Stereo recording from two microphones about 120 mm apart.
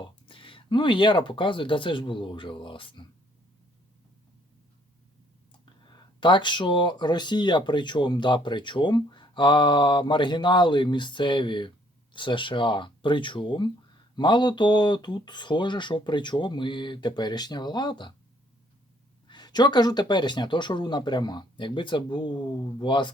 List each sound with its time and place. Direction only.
0.0 s speech: 45° left (ahead or behind)
5.8 s speech: 40° left (ahead or behind)
19.3 s speech: 35° left (ahead or behind)